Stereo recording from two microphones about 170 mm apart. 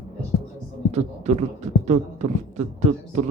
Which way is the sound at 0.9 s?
40° right (ahead or behind).